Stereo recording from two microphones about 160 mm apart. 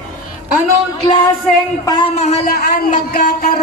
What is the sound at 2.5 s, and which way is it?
Speech, 65° left (ahead or behind).